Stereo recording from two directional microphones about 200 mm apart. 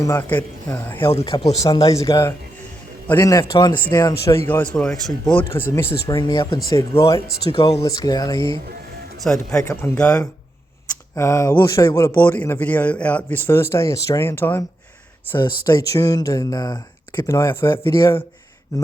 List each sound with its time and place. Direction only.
0.0 s speech: 10° left (ahead or behind)
1.1 s speech: 25° left (ahead or behind)
4.4 s speech: 10° left (ahead or behind)
6.1 s speech: 20° left (ahead or behind)
9.2 s speech: 5° left (ahead or behind)